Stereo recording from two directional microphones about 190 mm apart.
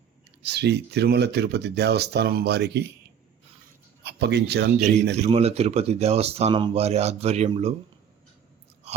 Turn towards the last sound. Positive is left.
turn(degrees=-35)  # may be behind; listen again after turning